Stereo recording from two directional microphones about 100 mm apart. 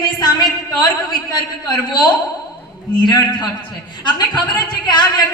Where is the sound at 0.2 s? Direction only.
45° left (ahead or behind).